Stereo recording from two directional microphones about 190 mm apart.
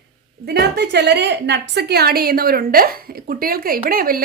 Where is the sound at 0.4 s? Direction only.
60° right (ahead or behind).